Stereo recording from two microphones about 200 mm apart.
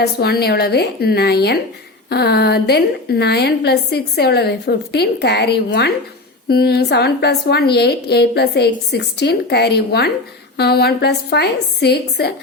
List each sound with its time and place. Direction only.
0.0 s a woman's voice: 50° left (ahead or behind)